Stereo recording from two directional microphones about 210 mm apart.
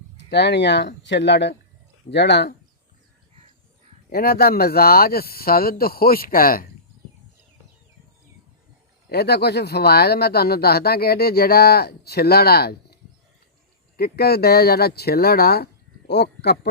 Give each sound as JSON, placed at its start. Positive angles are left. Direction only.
{"t": 0.2, "sound": "speech", "side_deg": 55}
{"t": 4.1, "sound": "speech", "side_deg": 45}
{"t": 9.0, "sound": "speech", "side_deg": 50}